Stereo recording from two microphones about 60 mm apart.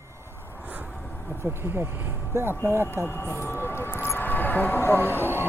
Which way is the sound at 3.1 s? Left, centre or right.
Left.